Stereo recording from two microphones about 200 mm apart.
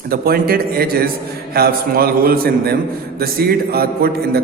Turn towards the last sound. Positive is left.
turn(degrees=-50)  # may be behind; listen again after turning